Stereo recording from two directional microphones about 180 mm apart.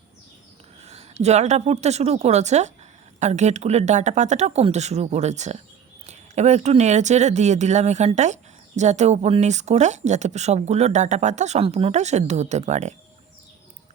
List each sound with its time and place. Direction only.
0.8 s a woman's voice: 35° right (ahead or behind)